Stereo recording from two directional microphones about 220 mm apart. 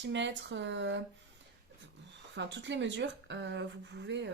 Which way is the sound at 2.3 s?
55° right (ahead or behind).